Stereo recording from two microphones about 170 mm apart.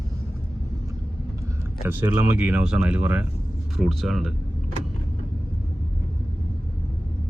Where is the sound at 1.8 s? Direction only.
10° right (ahead or behind).